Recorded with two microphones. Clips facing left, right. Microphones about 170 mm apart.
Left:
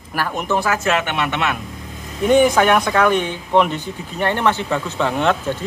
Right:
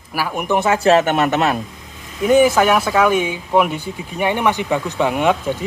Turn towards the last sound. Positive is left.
turn(degrees=-10)  # may be behind; listen again after turning